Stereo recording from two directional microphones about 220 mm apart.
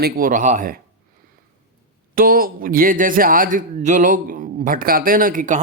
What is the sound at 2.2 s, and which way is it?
Speech, 40° right (ahead or behind).